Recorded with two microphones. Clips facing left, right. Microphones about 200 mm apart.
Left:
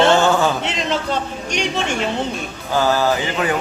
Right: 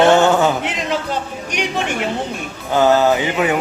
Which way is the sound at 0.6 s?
10° right (ahead or behind).